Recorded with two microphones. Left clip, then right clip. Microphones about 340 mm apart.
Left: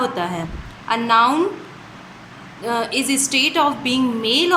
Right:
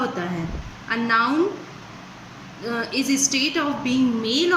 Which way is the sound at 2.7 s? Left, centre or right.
Centre.